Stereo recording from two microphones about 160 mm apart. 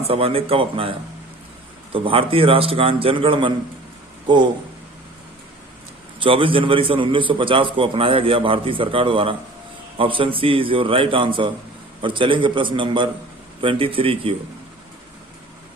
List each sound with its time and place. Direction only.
0.1 s a man's voice: 35° right (ahead or behind)
6.2 s a man's voice: 35° right (ahead or behind)